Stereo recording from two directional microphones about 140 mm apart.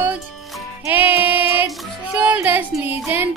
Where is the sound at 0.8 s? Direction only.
15° right (ahead or behind).